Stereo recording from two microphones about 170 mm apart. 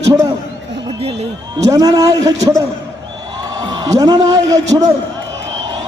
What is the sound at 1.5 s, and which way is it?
Speech, 20° right (ahead or behind).